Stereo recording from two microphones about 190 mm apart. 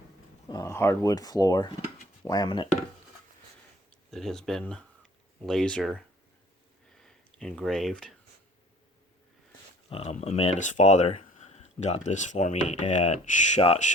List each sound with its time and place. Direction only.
0.4 s speech: 20° left (ahead or behind)
4.1 s speech: centre (ahead or behind)
7.0 s speech: 5° left (ahead or behind)
9.9 s speech: 30° left (ahead or behind)